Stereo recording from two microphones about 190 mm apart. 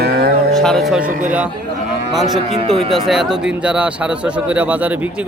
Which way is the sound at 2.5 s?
30° right (ahead or behind).